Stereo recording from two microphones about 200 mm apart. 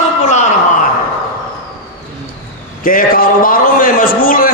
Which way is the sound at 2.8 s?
45° left (ahead or behind).